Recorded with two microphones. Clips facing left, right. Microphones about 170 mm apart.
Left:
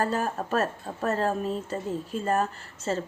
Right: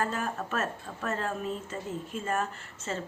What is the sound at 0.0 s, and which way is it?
A woman's voice, 35° left (ahead or behind).